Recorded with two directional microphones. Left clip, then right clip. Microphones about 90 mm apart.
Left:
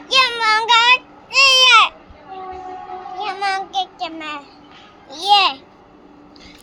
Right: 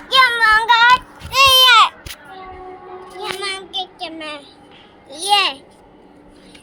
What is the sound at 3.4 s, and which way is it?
Child singing, 20° left (ahead or behind).